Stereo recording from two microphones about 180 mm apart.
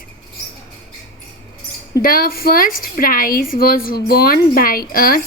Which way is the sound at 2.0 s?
50° left (ahead or behind).